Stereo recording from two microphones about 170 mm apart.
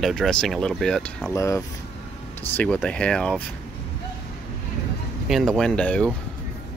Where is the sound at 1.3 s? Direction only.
15° left (ahead or behind).